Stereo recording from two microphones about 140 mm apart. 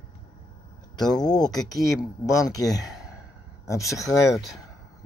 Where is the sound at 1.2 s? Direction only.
30° left (ahead or behind).